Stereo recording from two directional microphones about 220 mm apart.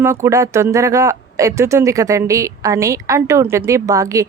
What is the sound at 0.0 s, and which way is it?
Speech, 15° right (ahead or behind).